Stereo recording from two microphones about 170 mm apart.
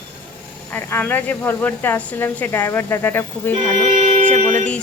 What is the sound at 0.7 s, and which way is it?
Speech, 10° left (ahead or behind).